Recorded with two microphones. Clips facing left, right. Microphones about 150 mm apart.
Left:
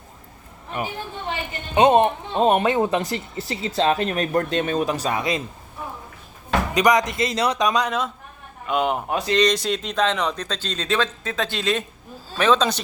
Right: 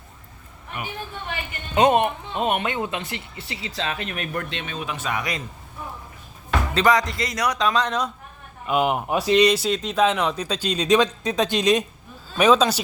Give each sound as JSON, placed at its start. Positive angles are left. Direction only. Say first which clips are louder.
{"t": 1.7, "sound": "speech", "louder": "left 2 dB", "side_deg": 25}
{"t": 6.7, "sound": "a man's voice", "louder": "left 1 dB", "side_deg": 20}
{"t": 7.7, "sound": "speech", "louder": "even", "side_deg": 10}